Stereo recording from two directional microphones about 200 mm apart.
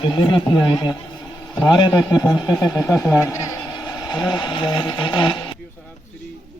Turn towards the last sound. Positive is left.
turn(degrees=25)  # may be behind; listen again after turning